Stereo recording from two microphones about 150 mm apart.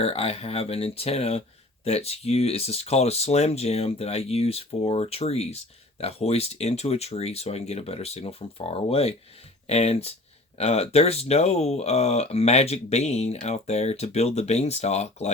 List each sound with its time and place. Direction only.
0.0 s speech: 40° left (ahead or behind)